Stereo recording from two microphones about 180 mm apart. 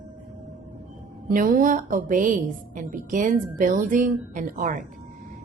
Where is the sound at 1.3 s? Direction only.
50° right (ahead or behind).